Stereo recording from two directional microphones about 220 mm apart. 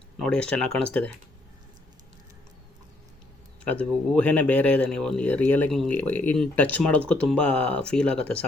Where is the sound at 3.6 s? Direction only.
5° left (ahead or behind).